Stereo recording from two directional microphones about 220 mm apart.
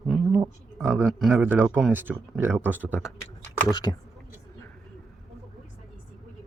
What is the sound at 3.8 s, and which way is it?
Speech, 15° left (ahead or behind).